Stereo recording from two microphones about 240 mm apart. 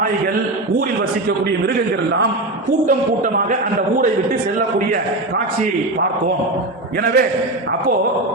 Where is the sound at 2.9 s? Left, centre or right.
Right.